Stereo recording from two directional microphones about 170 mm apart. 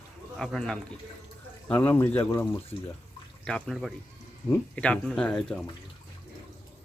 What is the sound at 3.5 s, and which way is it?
Speech, 5° left (ahead or behind).